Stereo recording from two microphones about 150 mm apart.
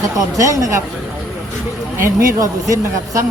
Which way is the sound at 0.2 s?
20° right (ahead or behind).